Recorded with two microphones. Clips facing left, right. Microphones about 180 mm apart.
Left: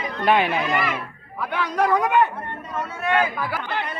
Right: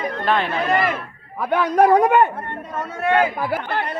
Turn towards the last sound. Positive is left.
turn(degrees=-40)  # may be behind; listen again after turning